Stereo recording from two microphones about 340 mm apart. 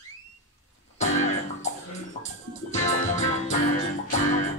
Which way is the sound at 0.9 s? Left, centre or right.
Centre.